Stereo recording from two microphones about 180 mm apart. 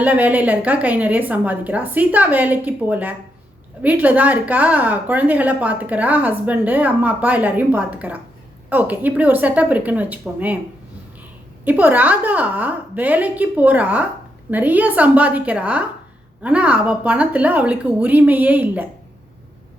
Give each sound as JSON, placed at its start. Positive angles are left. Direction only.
{"t": 0.0, "sound": "a woman's voice", "side_deg": -10}
{"t": 11.6, "sound": "a woman's voice", "side_deg": -10}